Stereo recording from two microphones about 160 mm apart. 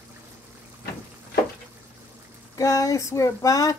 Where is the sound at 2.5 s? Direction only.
20° left (ahead or behind).